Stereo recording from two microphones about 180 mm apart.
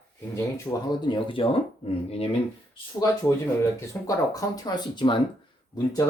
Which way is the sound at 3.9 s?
20° left (ahead or behind).